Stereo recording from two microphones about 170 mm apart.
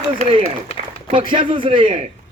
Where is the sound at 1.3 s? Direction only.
30° right (ahead or behind).